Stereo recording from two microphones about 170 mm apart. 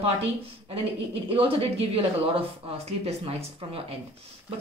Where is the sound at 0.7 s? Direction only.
35° right (ahead or behind).